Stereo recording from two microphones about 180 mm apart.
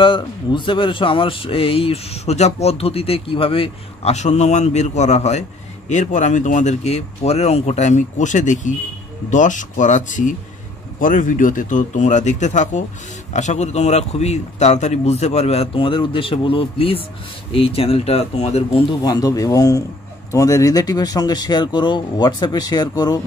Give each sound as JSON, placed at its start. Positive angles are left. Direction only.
{"t": 0.0, "sound": "speech", "side_deg": 30}